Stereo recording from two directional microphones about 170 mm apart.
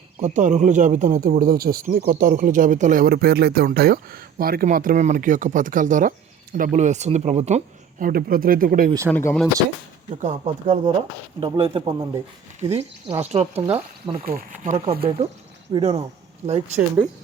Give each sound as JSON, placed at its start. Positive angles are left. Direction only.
{"t": 0.2, "sound": "speech", "side_deg": -45}
{"t": 9.0, "sound": "speech", "side_deg": 10}
{"t": 10.2, "sound": "speech", "side_deg": -45}
{"t": 13.6, "sound": "speech", "side_deg": -10}
{"t": 14.2, "sound": "speech", "side_deg": -60}
{"t": 15.7, "sound": "speech", "side_deg": -35}